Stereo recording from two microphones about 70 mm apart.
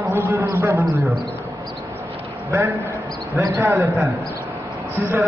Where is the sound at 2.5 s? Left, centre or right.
Right.